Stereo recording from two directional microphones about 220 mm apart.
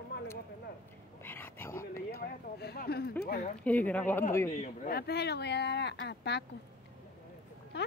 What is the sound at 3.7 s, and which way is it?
Speech, 5° left (ahead or behind).